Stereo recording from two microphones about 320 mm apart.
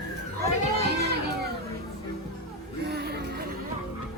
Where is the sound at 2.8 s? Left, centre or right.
Right.